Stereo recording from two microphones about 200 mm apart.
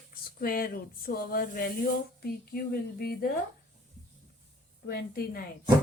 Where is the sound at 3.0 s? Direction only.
50° left (ahead or behind).